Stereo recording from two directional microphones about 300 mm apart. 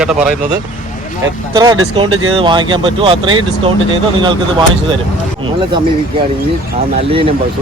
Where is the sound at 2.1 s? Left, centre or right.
Right.